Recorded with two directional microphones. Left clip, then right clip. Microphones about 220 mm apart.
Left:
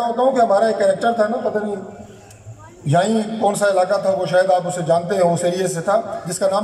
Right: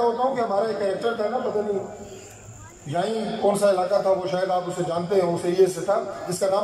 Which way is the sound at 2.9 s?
50° left (ahead or behind).